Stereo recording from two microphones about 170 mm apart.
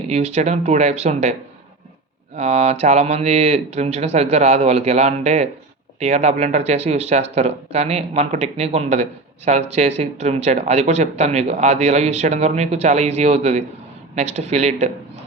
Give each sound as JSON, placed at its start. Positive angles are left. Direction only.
{"t": 0.1, "sound": "speech", "side_deg": -40}